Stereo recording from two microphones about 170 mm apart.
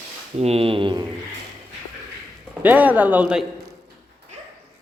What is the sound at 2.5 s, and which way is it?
Speech, 10° right (ahead or behind).